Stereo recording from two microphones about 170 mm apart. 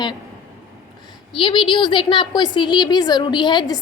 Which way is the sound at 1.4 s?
30° left (ahead or behind).